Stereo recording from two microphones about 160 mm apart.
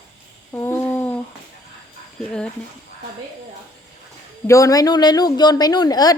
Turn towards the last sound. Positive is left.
turn(degrees=25)  # may be behind; listen again after turning